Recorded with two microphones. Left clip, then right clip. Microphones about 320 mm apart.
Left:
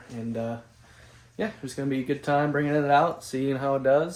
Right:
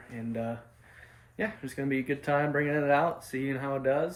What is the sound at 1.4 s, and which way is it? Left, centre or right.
Speech, centre.